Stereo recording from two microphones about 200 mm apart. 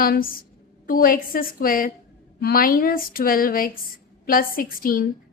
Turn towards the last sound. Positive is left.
turn(degrees=45)  # may be behind; listen again after turning